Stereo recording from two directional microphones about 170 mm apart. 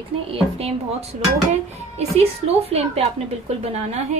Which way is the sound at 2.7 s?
40° right (ahead or behind).